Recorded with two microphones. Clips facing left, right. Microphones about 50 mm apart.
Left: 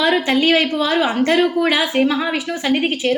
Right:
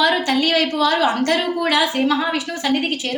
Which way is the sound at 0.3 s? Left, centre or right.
Left.